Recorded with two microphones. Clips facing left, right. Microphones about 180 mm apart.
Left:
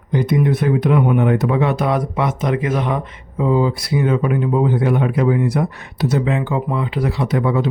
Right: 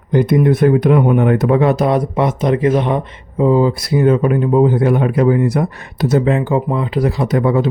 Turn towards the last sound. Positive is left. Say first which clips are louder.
# right 3 dB
turn(degrees=-45)  # may be behind; listen again after turning